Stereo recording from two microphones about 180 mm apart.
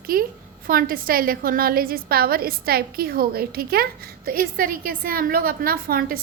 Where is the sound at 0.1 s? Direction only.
55° right (ahead or behind).